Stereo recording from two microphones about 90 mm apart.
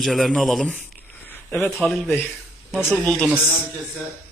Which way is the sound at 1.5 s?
25° left (ahead or behind).